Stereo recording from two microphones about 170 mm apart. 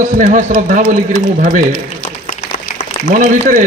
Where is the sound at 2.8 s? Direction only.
50° left (ahead or behind).